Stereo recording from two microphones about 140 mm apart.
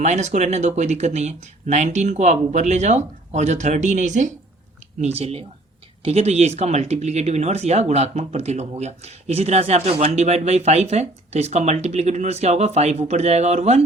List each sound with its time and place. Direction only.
0.0 s speech: 55° right (ahead or behind)
4.9 s speech: 50° right (ahead or behind)